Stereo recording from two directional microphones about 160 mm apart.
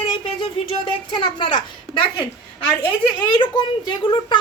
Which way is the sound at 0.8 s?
30° left (ahead or behind).